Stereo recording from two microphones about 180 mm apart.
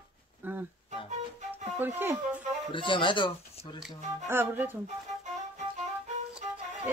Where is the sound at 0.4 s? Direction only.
10° right (ahead or behind).